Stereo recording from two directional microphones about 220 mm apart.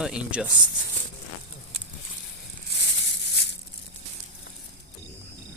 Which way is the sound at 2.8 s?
50° left (ahead or behind).